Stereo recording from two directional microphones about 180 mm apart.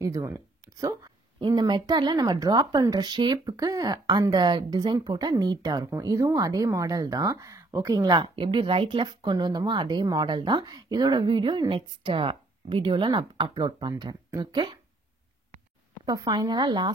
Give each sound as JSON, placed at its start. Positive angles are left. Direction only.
{"t": 0.0, "sound": "speech", "side_deg": -20}
{"t": 16.1, "sound": "speech", "side_deg": -20}